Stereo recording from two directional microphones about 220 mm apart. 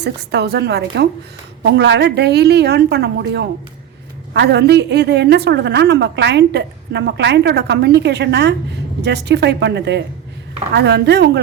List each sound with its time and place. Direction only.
0.0 s a woman's voice: 50° right (ahead or behind)